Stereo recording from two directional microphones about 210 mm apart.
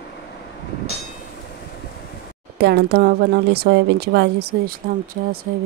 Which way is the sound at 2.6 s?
50° right (ahead or behind).